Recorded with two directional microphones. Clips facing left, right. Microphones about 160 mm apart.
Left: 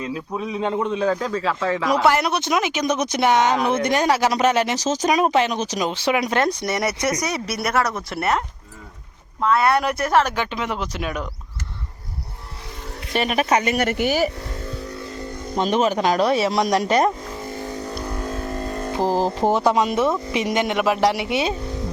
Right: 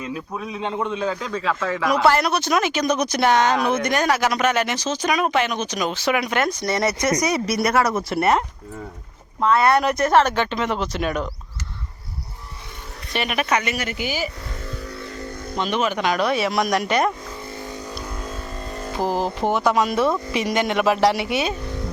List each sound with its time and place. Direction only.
0.0 s speech: 20° left (ahead or behind)
0.6 s speech: 35° left (ahead or behind)
6.6 s speech: 20° left (ahead or behind)
7.2 s speech: centre (ahead or behind)
13.1 s speech: 35° left (ahead or behind)
13.7 s speech: 60° left (ahead or behind)
15.5 s speech: 40° left (ahead or behind)
17.4 s vehicle: 40° left (ahead or behind)
18.9 s speech: 30° left (ahead or behind); by 21.3 s 15° left (ahead or behind)